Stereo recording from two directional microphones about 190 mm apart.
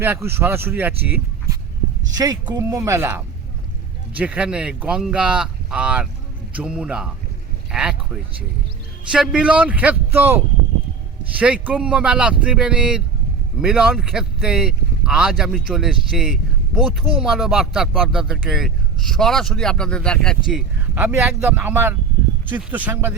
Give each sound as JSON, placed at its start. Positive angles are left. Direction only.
{"t": 0.0, "sound": "speech", "side_deg": -10}
{"t": 2.1, "sound": "speech", "side_deg": -20}